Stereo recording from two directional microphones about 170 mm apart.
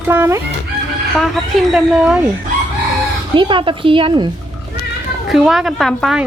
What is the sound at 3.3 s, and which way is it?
Speech, 30° right (ahead or behind).